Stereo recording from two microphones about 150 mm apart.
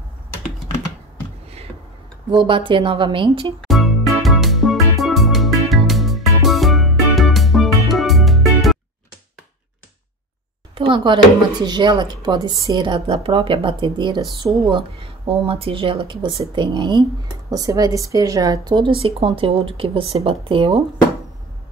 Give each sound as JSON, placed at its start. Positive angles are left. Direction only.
{"t": 2.3, "sound": "a woman's voice", "side_deg": -35}
{"t": 3.6, "sound": "music", "side_deg": 0}
{"t": 10.7, "sound": "a sound", "side_deg": -35}
{"t": 11.6, "sound": "a woman's voice", "side_deg": -30}
{"t": 19.0, "sound": "a woman's voice", "side_deg": -40}